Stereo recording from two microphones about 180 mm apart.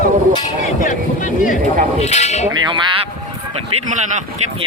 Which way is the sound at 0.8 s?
45° left (ahead or behind).